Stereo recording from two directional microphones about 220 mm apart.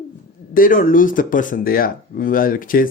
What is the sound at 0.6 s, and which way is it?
Speech, 35° left (ahead or behind).